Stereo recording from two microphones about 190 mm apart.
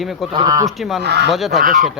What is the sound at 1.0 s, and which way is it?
Speech, 65° right (ahead or behind).